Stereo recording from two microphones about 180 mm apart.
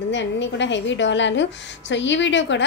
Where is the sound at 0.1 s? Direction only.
85° left.